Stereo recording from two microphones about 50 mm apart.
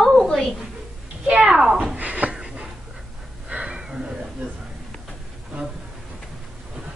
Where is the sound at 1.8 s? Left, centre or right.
Right.